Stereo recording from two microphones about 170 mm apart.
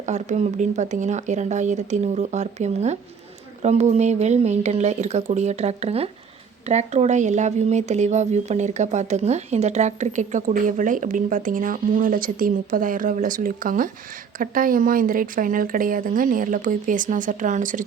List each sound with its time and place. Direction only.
0.0 s speech: 45° right (ahead or behind)